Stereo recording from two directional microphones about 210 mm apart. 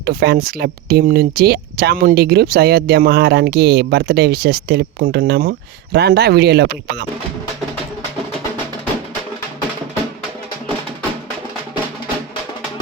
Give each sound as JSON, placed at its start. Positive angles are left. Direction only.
{"t": 0.0, "sound": "speech", "side_deg": -50}